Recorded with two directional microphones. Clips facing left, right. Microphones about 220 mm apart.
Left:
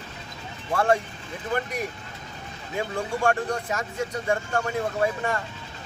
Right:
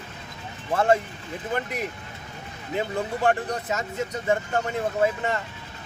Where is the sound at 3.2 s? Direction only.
20° right (ahead or behind).